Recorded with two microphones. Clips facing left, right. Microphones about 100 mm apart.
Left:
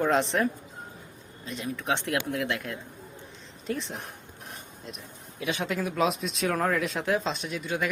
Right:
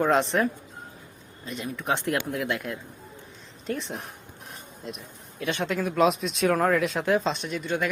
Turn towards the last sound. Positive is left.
turn(degrees=0)  # may be behind; listen again after turning